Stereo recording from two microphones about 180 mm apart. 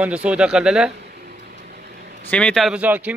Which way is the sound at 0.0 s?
5° right (ahead or behind).